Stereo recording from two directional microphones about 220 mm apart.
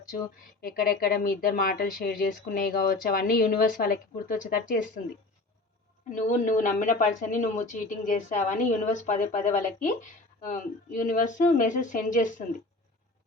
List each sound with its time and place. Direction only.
0.6 s speech: 40° left (ahead or behind)